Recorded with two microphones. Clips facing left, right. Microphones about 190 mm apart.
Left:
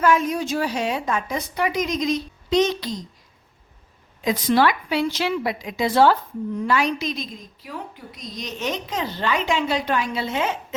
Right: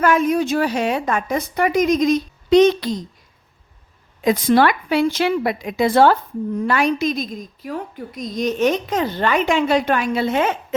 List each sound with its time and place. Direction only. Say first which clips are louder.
0.0 s a woman's voice: right 3 dB; 60° right (ahead or behind)
4.2 s a woman's voice: right 4 dB; 50° right (ahead or behind)